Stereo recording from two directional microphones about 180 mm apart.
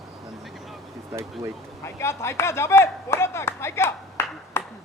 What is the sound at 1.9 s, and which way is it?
Speech, 15° left (ahead or behind).